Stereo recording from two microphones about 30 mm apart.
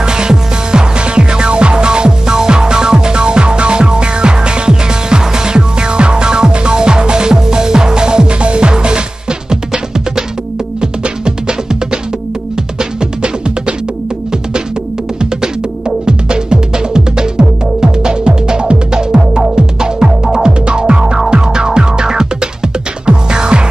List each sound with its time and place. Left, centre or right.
0.0 s music: right
9.5 s music: centre
16.1 s music: right